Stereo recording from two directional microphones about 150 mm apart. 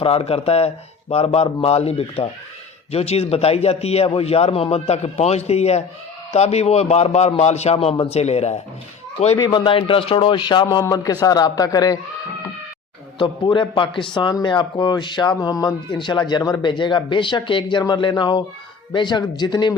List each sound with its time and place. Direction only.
0.0 s a man's voice: 40° left (ahead or behind)
9.4 s a man's voice: 30° left (ahead or behind)
13.1 s a man's voice: 35° left (ahead or behind)